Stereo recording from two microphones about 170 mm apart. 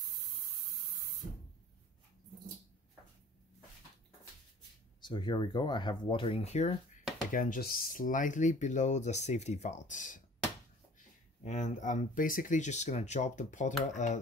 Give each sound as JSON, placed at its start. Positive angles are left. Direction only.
{"t": 5.0, "sound": "speech", "side_deg": 25}
{"t": 7.2, "sound": "speech", "side_deg": 50}